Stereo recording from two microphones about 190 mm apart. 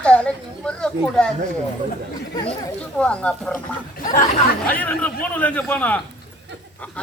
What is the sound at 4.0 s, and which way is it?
Speech, 45° left (ahead or behind).